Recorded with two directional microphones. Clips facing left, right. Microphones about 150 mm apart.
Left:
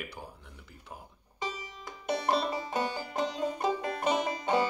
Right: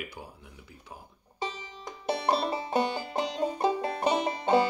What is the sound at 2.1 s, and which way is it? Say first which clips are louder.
Banjo: right 2 dB; 30° right (ahead or behind).